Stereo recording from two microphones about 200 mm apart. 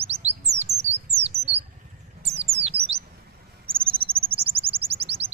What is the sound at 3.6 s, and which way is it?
Bird, 25° right (ahead or behind).